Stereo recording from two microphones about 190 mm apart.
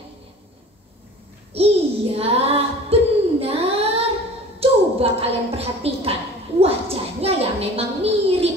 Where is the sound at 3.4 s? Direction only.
30° right (ahead or behind).